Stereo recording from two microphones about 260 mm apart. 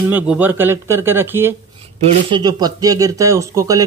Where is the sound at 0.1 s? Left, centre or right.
Centre.